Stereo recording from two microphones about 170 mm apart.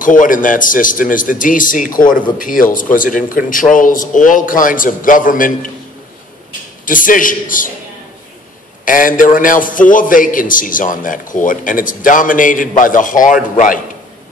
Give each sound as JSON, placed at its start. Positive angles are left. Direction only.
{"t": 0.0, "sound": "a man's voice", "side_deg": 50}
{"t": 6.9, "sound": "a man's voice", "side_deg": 50}
{"t": 8.8, "sound": "a man's voice", "side_deg": 55}